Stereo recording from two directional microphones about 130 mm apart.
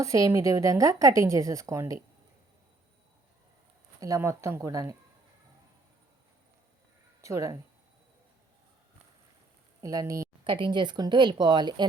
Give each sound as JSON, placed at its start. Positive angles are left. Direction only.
{"t": 0.0, "sound": "speech", "side_deg": -25}
{"t": 4.0, "sound": "speech", "side_deg": -25}
{"t": 7.2, "sound": "speech", "side_deg": -25}
{"t": 9.8, "sound": "speech", "side_deg": -25}
{"t": 10.4, "sound": "speech", "side_deg": -40}